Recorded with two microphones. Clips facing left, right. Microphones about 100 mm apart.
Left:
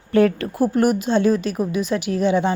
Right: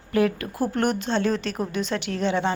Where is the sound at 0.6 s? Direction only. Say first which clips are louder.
Left 6 dB; 10° left (ahead or behind).